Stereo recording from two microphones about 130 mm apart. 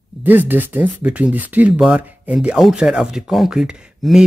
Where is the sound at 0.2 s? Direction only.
15° right (ahead or behind).